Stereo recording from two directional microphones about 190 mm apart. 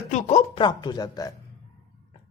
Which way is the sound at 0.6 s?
25° left (ahead or behind).